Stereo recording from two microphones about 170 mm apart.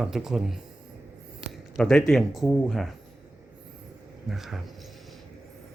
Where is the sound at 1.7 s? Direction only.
5° left (ahead or behind).